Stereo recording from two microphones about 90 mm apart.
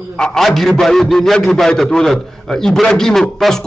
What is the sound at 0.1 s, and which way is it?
A man's voice, 5° left (ahead or behind).